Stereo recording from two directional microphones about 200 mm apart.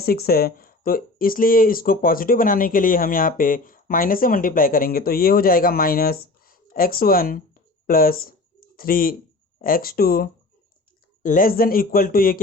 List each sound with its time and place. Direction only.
0.0 s speech: 50° left (ahead or behind)